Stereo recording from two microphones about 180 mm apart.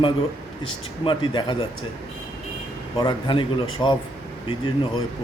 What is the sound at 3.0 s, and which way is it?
Speech, 25° left (ahead or behind).